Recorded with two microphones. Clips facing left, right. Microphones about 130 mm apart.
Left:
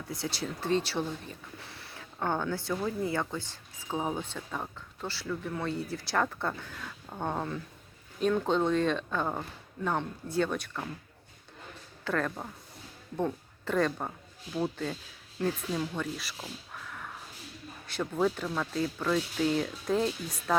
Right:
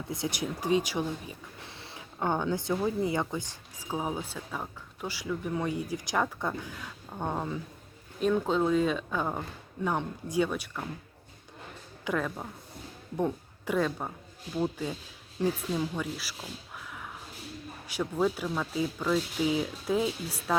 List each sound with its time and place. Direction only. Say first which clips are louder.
0.1 s speech: right 2 dB; 20° right (ahead or behind)
1.7 s a sound: right 1 dB; 25° right (ahead or behind)
2.1 s speech: right 2 dB; 15° right (ahead or behind)
3.8 s speech: even; 5° right (ahead or behind)
12.0 s a woman's voice: even; 5° right (ahead or behind)
15.4 s speech: right 2 dB; 10° right (ahead or behind)
16.7 s a sound: even; 5° right (ahead or behind)
17.8 s speech: even; 10° right (ahead or behind)